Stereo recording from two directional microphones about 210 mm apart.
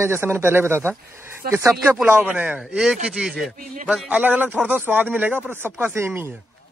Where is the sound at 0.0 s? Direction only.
10° right (ahead or behind).